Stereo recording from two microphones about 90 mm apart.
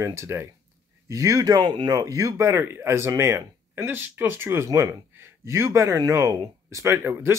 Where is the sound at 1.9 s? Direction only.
40° right (ahead or behind).